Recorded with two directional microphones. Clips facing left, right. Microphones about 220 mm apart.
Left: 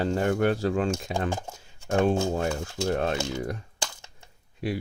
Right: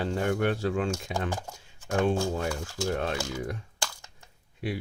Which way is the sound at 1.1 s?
25° left (ahead or behind).